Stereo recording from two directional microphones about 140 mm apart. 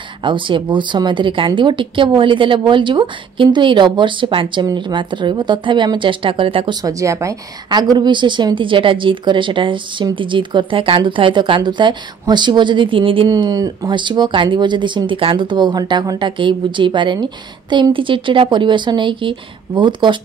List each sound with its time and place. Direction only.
0.2 s speech: 35° right (ahead or behind)
6.8 s speech: 25° right (ahead or behind); by 13.3 s 40° right (ahead or behind)
13.3 s speech: 25° right (ahead or behind)